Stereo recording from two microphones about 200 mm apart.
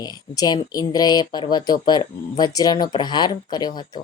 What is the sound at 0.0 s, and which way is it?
Speech, 20° left (ahead or behind).